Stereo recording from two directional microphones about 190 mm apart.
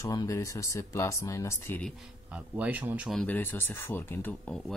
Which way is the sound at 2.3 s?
10° right (ahead or behind).